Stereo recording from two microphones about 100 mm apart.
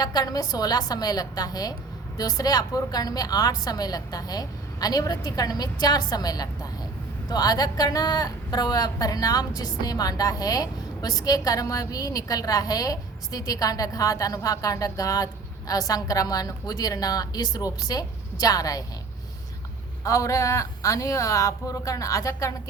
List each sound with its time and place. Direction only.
0.0 s a woman's voice: 40° left (ahead or behind)
20.1 s a woman's voice: 30° left (ahead or behind)